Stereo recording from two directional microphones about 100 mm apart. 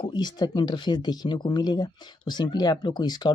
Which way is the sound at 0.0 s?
45° left (ahead or behind).